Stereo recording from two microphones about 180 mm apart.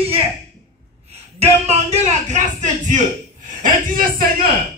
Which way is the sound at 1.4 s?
35° right (ahead or behind).